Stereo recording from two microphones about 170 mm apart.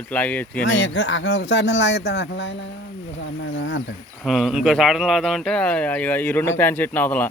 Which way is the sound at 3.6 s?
90° left.